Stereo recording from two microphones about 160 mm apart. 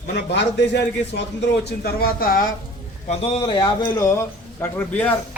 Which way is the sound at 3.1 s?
35° left (ahead or behind).